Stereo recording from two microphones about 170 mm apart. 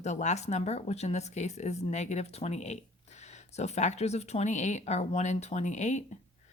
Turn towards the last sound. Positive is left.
turn(degrees=45)  # may be behind; listen again after turning